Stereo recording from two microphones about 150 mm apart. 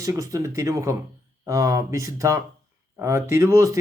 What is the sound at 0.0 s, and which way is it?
Speech, 20° right (ahead or behind).